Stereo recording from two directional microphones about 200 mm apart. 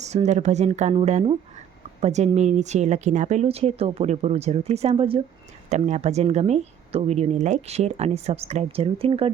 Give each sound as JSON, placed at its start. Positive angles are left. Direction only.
{"t": 0.0, "sound": "speech", "side_deg": -35}